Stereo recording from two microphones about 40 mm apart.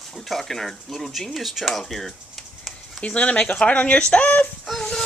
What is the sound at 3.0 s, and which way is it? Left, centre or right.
Speech, left.